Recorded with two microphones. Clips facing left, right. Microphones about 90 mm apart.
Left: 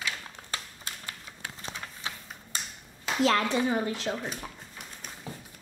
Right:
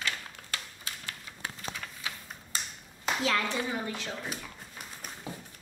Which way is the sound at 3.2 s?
45° left (ahead or behind).